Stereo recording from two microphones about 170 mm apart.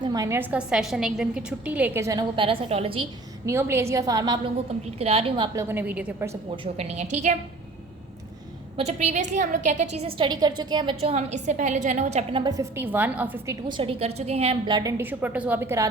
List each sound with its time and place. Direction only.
0.0 s a woman's voice: 20° right (ahead or behind)
2.3 s a woman's voice: 30° right (ahead or behind)
3.4 s a woman's voice: 15° right (ahead or behind)
4.5 s a woman's voice: 35° right (ahead or behind)
5.5 s a woman's voice: 10° right (ahead or behind)
6.7 s a woman's voice: 45° right (ahead or behind)
8.7 s a woman's voice: 40° right (ahead or behind)
11.1 s a woman's voice: 45° right (ahead or behind)
12.4 s a woman's voice: 20° right (ahead or behind)
13.7 s a woman's voice: 30° right (ahead or behind); by 15.9 s 15° right (ahead or behind)